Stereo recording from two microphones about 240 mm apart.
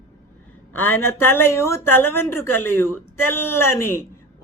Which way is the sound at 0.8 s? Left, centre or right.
Centre.